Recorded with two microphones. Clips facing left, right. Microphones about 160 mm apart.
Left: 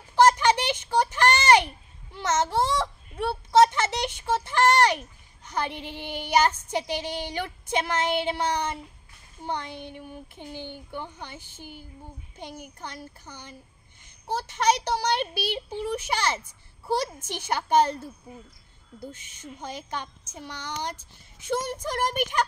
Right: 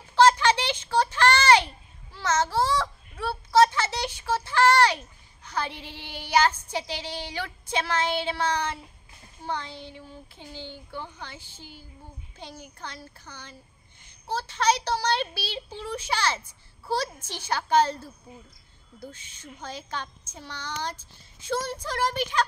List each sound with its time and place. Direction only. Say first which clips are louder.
0.1 s a sound: even; 15° left (ahead or behind)
2.1 s a child's voice: even; 20° left (ahead or behind)
5.4 s child singing: left 2 dB; 20° left (ahead or behind)
16.8 s a woman's voice: left 2 dB; 20° left (ahead or behind)
19.0 s child singing: left 2 dB; 20° left (ahead or behind)